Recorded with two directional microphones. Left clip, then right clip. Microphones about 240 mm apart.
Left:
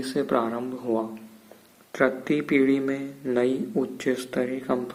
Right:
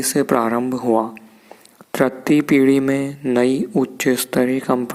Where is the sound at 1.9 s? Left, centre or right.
Right.